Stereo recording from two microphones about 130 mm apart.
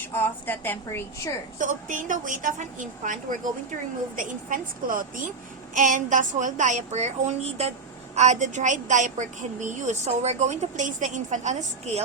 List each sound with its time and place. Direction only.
0.0 s a woman's voice: 15° left (ahead or behind)
1.5 s a woman's voice: 80° right
5.7 s a woman's voice: 75° right (ahead or behind); by 12.0 s 60° right (ahead or behind)